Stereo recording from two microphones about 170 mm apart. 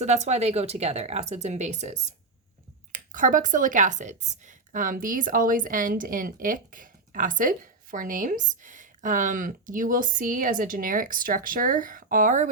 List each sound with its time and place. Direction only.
0.0 s speech: 40° right (ahead or behind)